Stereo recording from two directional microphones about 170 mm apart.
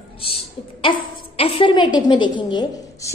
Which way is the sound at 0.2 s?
35° left (ahead or behind).